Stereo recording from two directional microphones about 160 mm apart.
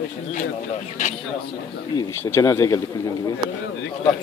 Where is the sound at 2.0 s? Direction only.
15° left (ahead or behind).